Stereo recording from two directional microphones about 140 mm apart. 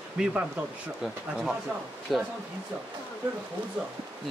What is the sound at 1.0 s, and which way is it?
Speech, 5° right (ahead or behind).